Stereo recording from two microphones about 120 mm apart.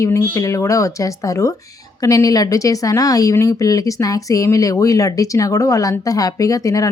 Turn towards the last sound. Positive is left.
turn(degrees=30)  # may be behind; listen again after turning